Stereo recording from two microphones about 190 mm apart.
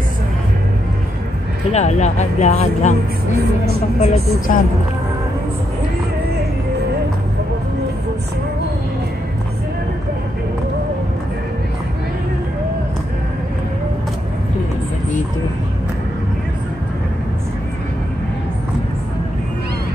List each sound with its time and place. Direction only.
1.7 s speech: 35° left (ahead or behind)
4.0 s speech: 35° left (ahead or behind)